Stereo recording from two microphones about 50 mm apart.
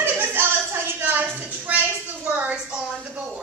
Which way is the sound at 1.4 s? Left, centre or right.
Right.